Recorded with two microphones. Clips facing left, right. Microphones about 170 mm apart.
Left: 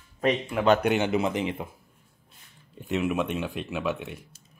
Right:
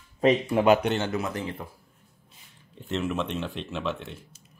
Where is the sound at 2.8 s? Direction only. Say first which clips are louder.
Left 2 dB; 15° left (ahead or behind).